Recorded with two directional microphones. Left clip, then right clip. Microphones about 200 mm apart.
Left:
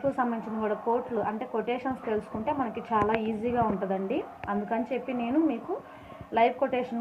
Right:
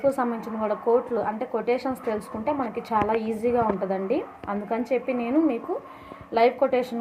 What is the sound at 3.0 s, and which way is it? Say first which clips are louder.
A woman's voice: right 3 dB; 15° right (ahead or behind).